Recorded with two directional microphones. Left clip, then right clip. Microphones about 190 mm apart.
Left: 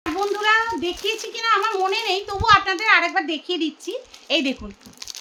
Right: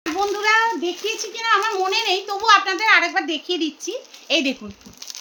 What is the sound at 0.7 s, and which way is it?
A child's voice, 10° left (ahead or behind).